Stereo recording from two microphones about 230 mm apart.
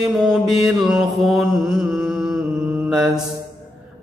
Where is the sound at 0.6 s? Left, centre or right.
Centre.